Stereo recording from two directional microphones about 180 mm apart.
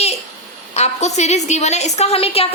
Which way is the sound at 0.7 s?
40° left (ahead or behind).